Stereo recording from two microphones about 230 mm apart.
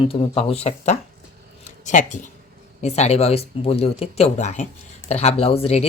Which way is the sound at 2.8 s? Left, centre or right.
Left.